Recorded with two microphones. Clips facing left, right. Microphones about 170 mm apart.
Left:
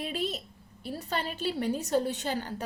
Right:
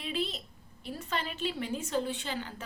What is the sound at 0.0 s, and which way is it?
A woman's voice, 45° left (ahead or behind).